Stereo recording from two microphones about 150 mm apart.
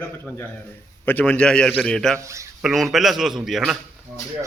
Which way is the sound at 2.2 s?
20° right (ahead or behind).